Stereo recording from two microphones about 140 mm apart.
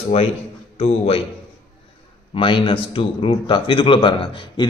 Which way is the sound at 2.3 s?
35° left (ahead or behind).